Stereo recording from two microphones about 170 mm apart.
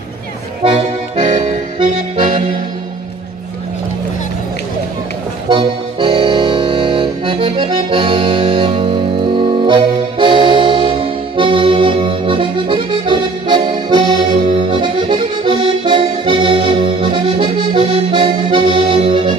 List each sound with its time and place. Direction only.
0.7 s accordion: 35° right (ahead or behind)
5.5 s accordion: 30° right (ahead or behind)